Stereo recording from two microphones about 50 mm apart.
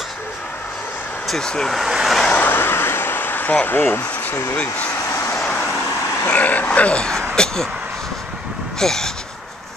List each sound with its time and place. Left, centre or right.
1.4 s speech: centre
1.8 s vehicle: centre
2.3 s vehicle: left
3.6 s speech: left
4.0 s speech: left
4.6 s speech: left
5.1 s vehicle: left
6.2 s a sound: left; by 7.2 s centre
8.7 s speech: centre